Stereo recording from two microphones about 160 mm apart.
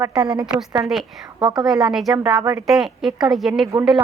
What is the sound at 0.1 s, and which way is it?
A woman's voice, 5° right (ahead or behind).